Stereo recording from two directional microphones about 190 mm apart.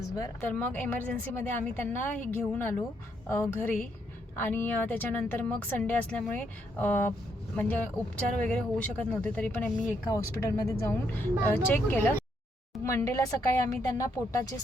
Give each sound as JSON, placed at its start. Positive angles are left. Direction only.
{"t": 0.2, "sound": "a woman's voice", "side_deg": 10}